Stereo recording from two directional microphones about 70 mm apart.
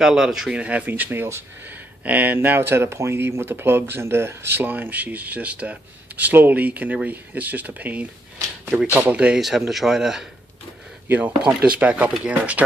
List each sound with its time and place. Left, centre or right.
0.0 s speech: centre
9.1 s speech: centre
9.4 s speech: centre
11.1 s speech: centre